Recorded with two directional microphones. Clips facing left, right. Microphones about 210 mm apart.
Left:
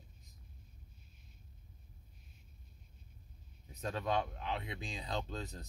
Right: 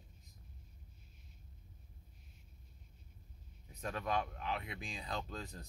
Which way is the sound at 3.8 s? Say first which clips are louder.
Left 2 dB; 25° left (ahead or behind).